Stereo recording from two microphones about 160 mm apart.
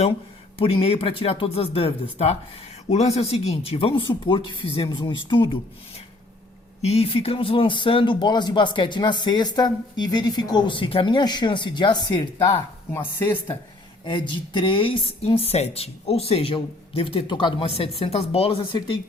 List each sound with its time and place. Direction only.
0.6 s speech: 35° left (ahead or behind)
6.8 s speech: 40° left (ahead or behind)
12.9 s speech: 15° left (ahead or behind)
14.0 s speech: 30° left (ahead or behind)